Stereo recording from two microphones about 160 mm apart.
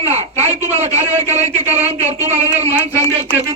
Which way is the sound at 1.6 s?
10° right (ahead or behind).